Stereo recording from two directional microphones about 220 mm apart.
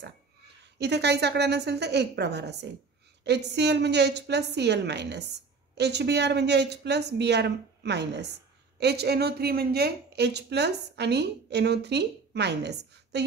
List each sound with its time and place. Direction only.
0.7 s a woman's voice: 50° right (ahead or behind)